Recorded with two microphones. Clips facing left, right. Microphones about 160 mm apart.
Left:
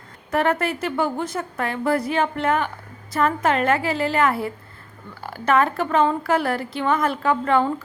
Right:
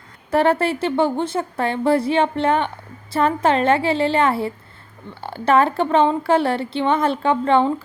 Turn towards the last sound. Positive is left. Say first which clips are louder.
# right 3 dB
turn(degrees=-25)  # may be behind; listen again after turning